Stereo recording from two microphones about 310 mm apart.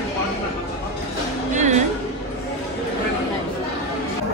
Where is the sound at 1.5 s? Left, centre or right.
Right.